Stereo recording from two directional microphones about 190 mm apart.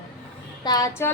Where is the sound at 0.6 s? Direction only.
20° left (ahead or behind).